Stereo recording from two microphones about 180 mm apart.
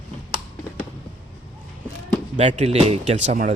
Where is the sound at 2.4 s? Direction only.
40° right (ahead or behind).